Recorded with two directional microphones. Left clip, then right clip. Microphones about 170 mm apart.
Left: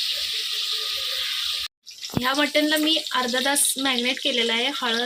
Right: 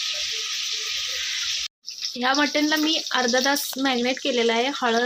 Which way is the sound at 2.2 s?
35° right (ahead or behind).